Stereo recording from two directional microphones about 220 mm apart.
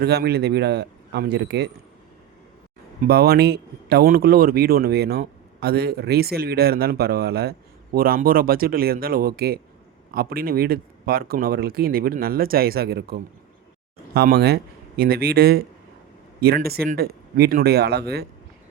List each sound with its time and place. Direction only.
0.0 s speech: 45° right (ahead or behind)
3.1 s speech: 45° right (ahead or behind)